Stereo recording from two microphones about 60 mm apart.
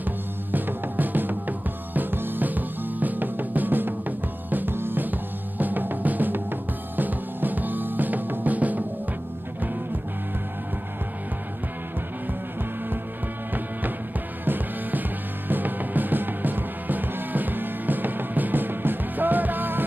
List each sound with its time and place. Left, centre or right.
0.0 s music: right
14.4 s music: right